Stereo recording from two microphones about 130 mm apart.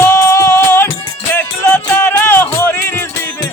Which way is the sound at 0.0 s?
20° left (ahead or behind).